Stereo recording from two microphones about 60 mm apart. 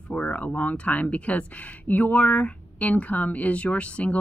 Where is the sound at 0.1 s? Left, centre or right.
Left.